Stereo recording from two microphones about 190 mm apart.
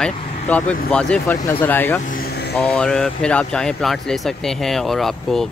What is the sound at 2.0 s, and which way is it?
Vehicle, 50° left (ahead or behind).